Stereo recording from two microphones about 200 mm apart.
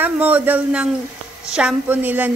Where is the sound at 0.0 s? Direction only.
10° right (ahead or behind).